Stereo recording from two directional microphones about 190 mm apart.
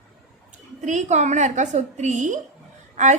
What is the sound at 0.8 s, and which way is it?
A woman's voice, 40° right (ahead or behind).